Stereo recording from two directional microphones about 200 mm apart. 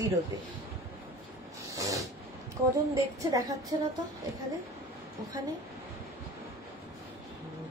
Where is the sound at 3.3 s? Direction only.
15° right (ahead or behind).